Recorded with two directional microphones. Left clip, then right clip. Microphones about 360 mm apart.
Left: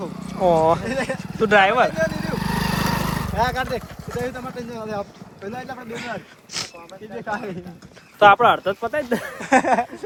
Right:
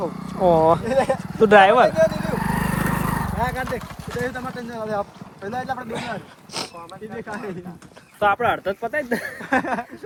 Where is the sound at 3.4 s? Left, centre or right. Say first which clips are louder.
Left 5 dB; centre.